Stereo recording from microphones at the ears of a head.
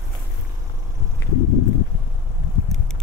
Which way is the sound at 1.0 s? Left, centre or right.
Left.